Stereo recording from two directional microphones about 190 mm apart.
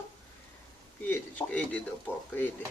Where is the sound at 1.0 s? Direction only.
10° left (ahead or behind).